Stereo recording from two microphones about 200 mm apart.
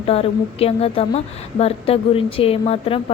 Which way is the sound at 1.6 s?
30° left (ahead or behind).